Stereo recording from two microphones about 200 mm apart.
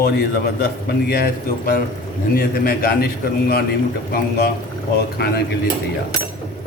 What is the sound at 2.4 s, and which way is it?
Speech, 45° left (ahead or behind).